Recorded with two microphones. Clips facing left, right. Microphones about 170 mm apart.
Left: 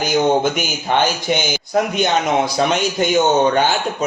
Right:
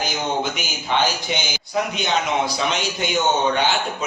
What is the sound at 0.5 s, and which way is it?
A man's voice, 50° left (ahead or behind).